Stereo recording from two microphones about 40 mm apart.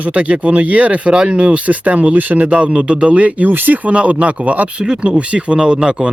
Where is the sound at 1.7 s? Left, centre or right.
Right.